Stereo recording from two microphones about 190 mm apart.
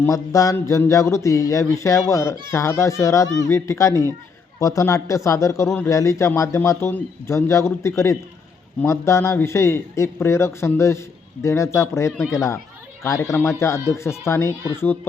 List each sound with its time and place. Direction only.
0.0 s a man's voice: 15° left (ahead or behind)